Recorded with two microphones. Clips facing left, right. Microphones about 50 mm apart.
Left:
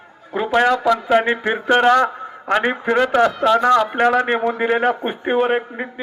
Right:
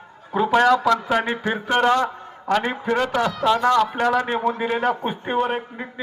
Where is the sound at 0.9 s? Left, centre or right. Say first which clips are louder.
Left 4 dB; centre.